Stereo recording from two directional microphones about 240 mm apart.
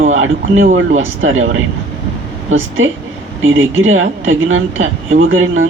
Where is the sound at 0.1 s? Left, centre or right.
Right.